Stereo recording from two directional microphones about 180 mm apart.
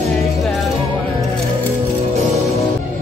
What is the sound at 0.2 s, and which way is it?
Music, centre (ahead or behind).